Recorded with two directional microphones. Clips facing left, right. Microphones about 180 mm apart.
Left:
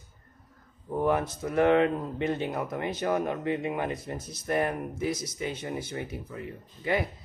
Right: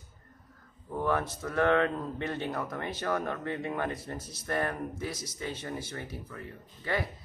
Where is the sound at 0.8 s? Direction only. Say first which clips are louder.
Left 4 dB; 15° left (ahead or behind).